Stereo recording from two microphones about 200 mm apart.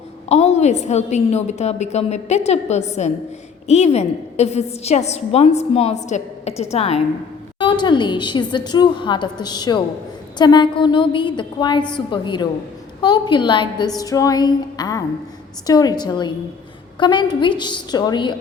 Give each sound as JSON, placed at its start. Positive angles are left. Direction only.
{"t": 0.3, "sound": "a woman's voice", "side_deg": 30}